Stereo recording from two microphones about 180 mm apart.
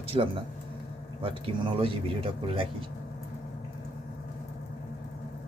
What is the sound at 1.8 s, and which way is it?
Speech, 30° right (ahead or behind).